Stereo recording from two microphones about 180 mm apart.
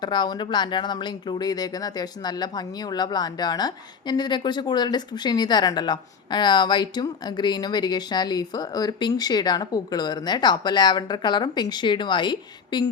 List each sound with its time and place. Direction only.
0.0 s speech: 25° left (ahead or behind)